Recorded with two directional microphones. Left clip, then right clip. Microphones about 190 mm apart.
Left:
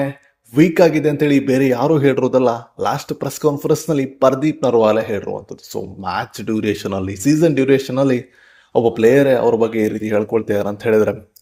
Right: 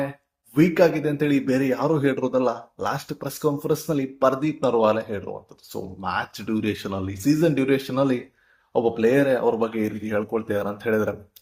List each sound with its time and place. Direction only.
0.5 s speech: 40° left (ahead or behind)